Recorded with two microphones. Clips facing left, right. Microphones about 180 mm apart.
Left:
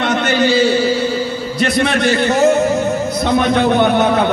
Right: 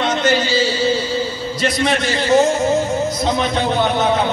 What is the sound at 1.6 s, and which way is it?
A man's voice, 60° left (ahead or behind).